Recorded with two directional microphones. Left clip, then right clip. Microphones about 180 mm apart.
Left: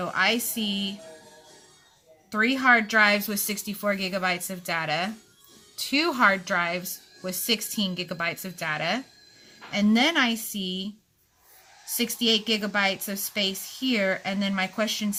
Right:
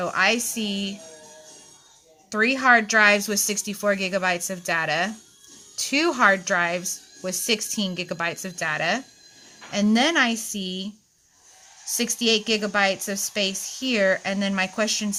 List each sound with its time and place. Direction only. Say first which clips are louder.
0.0 s speech: right 3 dB; 35° right (ahead or behind)
2.3 s speech: right 2 dB; 35° right (ahead or behind)
11.9 s speech: right 2 dB; 35° right (ahead or behind)